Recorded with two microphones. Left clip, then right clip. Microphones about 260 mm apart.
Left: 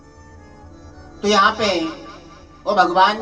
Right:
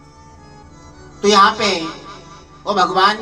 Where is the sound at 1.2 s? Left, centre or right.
Right.